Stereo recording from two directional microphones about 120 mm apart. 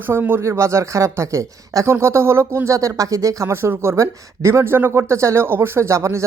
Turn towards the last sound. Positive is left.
turn(degrees=-25)  # may be behind; listen again after turning